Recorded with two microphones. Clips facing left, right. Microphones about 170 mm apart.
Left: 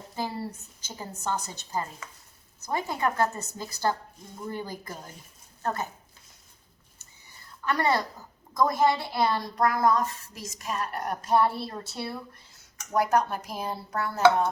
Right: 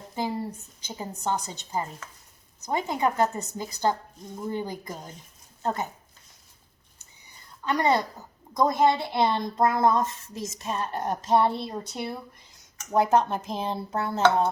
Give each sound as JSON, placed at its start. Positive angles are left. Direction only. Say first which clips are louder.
{"t": 0.2, "sound": "a woman's voice", "louder": "right 3 dB", "side_deg": -15}
{"t": 7.0, "sound": "a sound", "louder": "even", "side_deg": -20}
{"t": 8.5, "sound": "speech", "louder": "right 2 dB", "side_deg": -20}